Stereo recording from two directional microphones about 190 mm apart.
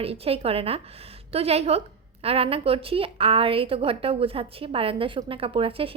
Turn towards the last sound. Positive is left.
turn(degrees=-30)  # may be behind; listen again after turning